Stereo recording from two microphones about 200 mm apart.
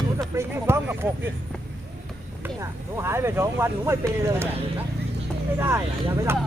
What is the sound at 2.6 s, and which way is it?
Speech, 10° right (ahead or behind).